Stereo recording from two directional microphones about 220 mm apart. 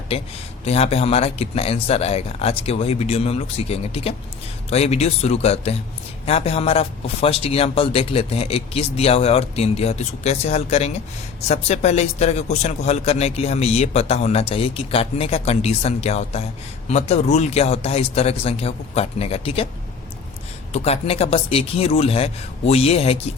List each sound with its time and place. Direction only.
0.6 s speech: 30° left (ahead or behind)
20.7 s speech: 30° left (ahead or behind)